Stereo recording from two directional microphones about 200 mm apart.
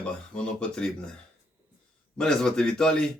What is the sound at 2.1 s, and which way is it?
Speech, 5° left (ahead or behind).